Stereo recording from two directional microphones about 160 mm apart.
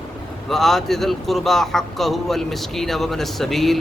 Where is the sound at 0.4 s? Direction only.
Centre (ahead or behind).